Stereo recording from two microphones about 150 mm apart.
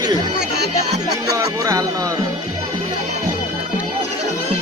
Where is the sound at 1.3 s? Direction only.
20° right (ahead or behind).